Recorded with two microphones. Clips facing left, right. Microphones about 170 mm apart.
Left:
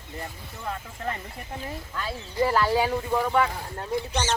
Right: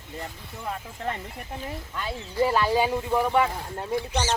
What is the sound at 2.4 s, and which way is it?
Speech, 15° right (ahead or behind).